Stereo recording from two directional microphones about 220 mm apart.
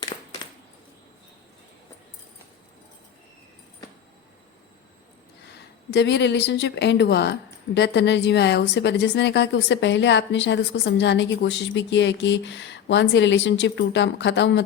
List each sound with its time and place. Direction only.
5.5 s speech: 50° left (ahead or behind)